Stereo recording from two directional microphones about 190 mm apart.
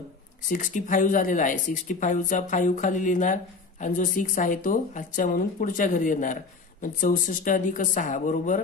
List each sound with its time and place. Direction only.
0.5 s speech: 40° left (ahead or behind)